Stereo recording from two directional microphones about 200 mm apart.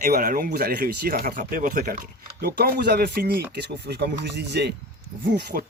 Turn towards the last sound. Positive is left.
turn(degrees=-45)  # may be behind; listen again after turning